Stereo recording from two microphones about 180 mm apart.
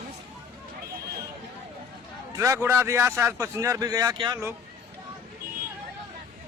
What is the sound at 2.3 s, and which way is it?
Speech, 15° right (ahead or behind).